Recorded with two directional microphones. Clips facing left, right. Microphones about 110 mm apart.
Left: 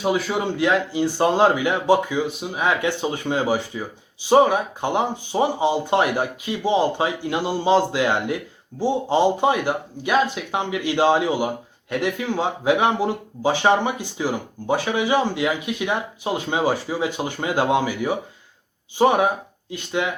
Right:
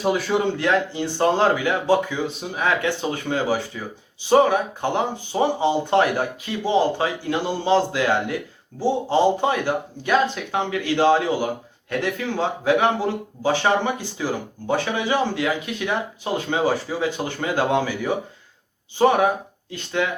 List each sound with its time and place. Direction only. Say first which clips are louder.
0.0 s speech: right 1 dB; 5° left (ahead or behind)